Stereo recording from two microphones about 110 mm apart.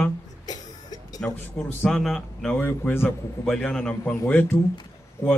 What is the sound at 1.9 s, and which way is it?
Speech, 5° left (ahead or behind).